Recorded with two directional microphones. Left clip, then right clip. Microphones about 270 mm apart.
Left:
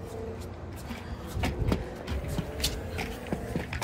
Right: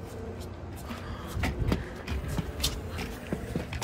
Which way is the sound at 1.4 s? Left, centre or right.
Centre.